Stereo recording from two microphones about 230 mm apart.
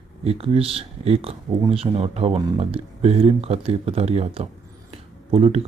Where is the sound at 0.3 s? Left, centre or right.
Right.